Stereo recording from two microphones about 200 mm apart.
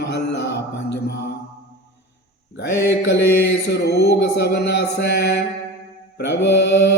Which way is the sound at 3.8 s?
55° left (ahead or behind).